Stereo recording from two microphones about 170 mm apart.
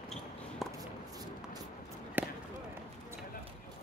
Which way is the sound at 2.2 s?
10° right (ahead or behind).